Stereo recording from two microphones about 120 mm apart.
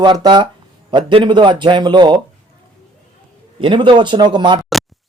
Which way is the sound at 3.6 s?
45° right (ahead or behind).